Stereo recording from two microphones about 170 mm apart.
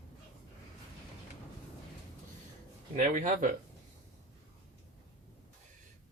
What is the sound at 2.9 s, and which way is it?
Speech, 50° right (ahead or behind).